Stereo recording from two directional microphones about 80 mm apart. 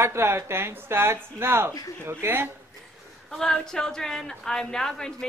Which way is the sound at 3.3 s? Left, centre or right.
Centre.